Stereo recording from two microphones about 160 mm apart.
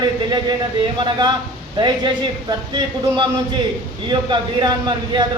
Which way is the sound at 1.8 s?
30° right (ahead or behind).